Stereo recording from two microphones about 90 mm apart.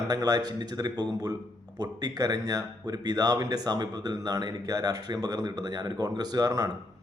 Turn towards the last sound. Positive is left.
turn(degrees=-45)  # may be behind; listen again after turning